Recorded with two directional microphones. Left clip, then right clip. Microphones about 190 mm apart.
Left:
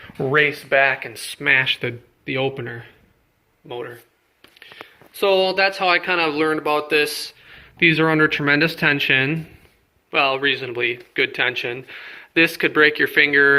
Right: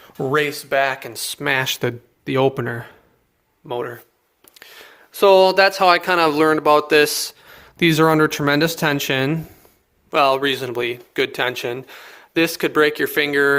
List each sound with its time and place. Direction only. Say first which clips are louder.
0.2 s speech: left 2 dB; 15° right (ahead or behind)
1.1 s speech: left 3 dB; 35° right (ahead or behind); by 7.2 s 55° right (ahead or behind)
7.8 s speech: right 1 dB; 35° right (ahead or behind)